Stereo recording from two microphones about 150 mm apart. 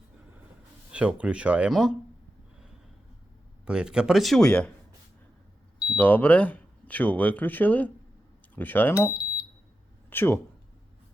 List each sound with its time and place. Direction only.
0.9 s speech: 10° right (ahead or behind)
3.7 s speech: 5° right (ahead or behind)
6.0 s speech: 10° left (ahead or behind)
9.0 s smoke detector: 25° left (ahead or behind)
10.1 s speech: 15° left (ahead or behind)